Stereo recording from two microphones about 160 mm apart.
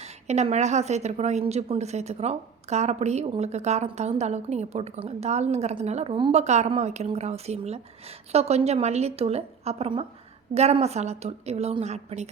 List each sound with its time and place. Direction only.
0.0 s a woman's voice: 45° right (ahead or behind)